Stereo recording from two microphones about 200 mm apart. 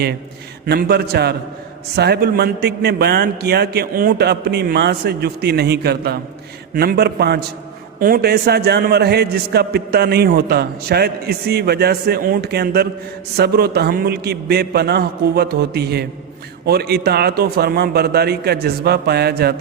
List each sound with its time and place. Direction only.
0.6 s a man's voice: 50° right (ahead or behind)